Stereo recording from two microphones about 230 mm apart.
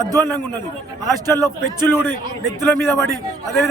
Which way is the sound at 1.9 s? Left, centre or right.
Centre.